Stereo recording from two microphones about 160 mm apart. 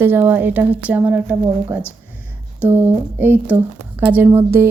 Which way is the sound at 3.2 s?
10° right (ahead or behind).